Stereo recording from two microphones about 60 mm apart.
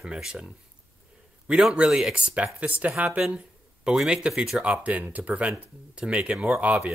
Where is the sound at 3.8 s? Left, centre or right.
Centre.